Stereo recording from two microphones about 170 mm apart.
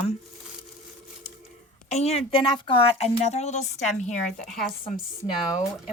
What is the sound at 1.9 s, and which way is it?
Speech, 40° left (ahead or behind).